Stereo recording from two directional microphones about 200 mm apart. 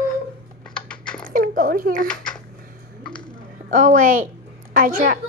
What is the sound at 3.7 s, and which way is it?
A woman's voice, 40° right (ahead or behind).